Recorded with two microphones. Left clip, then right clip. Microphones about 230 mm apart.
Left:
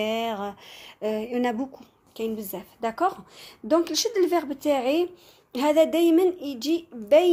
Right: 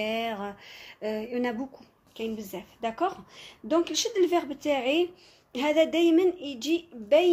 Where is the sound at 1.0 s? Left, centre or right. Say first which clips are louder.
Left 4 dB; left.